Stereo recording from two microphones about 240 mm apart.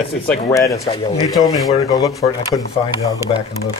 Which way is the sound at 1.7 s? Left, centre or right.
Centre.